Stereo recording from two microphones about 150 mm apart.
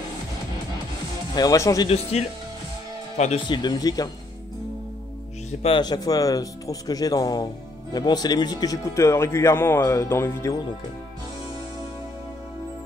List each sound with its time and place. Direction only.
1.3 s speech: 25° left (ahead or behind)
2.1 s speech: 45° left (ahead or behind)
3.3 s speech: 30° left (ahead or behind)
5.6 s speech: 35° left (ahead or behind)